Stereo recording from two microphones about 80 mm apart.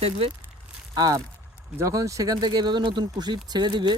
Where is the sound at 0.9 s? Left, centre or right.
Right.